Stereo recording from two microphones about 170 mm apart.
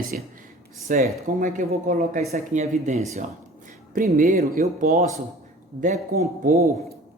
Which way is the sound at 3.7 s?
55° right (ahead or behind).